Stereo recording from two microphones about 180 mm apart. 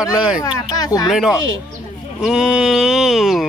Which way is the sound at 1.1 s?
Centre (ahead or behind).